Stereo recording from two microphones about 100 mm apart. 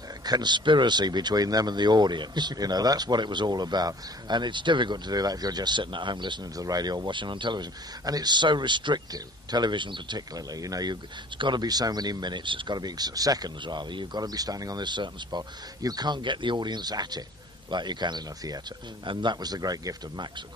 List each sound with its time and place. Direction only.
0.2 s speech: 45° right (ahead or behind)
11.3 s speech: 50° right (ahead or behind)